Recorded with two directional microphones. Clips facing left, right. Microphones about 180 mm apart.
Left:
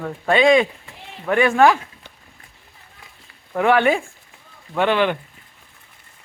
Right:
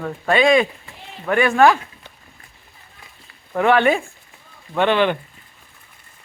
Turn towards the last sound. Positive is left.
turn(degrees=5)  # may be behind; listen again after turning